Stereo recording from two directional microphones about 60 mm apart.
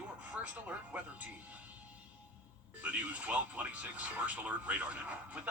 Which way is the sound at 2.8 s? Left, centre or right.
Right.